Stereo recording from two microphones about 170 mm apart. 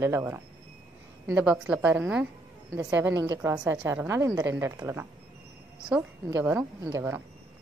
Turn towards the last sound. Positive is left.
turn(degrees=-15)  # may be behind; listen again after turning